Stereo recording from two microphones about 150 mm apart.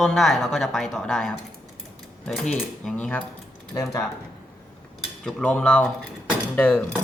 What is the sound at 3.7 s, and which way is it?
Speech, 20° left (ahead or behind).